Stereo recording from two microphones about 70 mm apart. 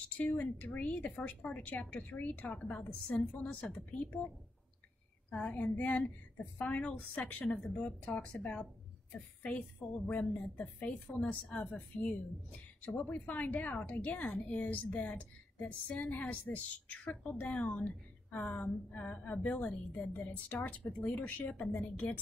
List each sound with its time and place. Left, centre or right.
0.2 s a woman's voice: left
5.3 s a woman's voice: left